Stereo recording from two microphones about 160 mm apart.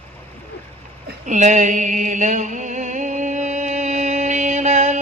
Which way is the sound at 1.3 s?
50° right (ahead or behind).